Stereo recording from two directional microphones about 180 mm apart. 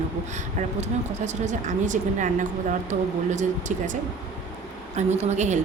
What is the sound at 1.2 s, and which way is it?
Speech, 40° right (ahead or behind).